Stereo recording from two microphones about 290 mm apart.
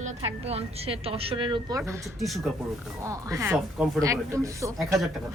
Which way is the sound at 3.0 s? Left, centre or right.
Centre.